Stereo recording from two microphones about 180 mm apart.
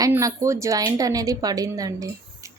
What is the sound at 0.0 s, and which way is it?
A woman's voice, 20° right (ahead or behind).